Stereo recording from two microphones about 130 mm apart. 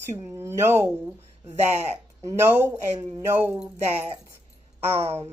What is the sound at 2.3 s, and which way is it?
Speech, 20° right (ahead or behind).